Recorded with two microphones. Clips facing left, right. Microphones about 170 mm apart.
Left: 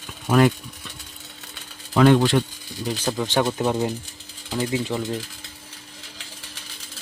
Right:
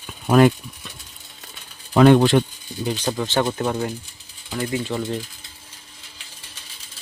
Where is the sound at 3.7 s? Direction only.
20° left (ahead or behind).